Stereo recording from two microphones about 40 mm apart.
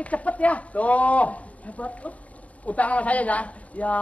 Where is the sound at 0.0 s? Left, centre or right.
Left.